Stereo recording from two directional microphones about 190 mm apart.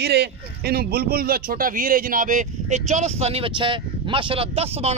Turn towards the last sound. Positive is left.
turn(degrees=-30)  # may be behind; listen again after turning